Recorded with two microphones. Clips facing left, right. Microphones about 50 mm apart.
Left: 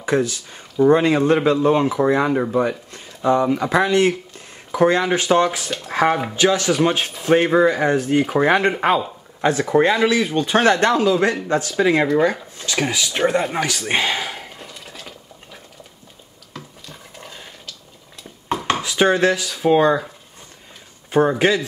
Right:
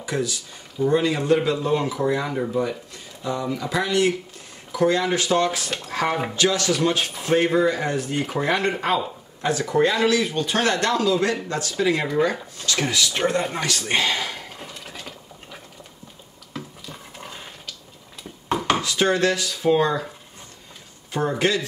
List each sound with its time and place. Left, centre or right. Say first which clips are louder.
0.0 s speech: left 6 dB; left
5.9 s a sound: left 7 dB; left
6.3 s a man's voice: left 4 dB; left
14.6 s mechanisms: even; centre
16.5 s a sound: right 2 dB; centre
18.5 s dishes: even; centre
18.8 s speech: left 4 dB; left
21.1 s speech: left 6 dB; left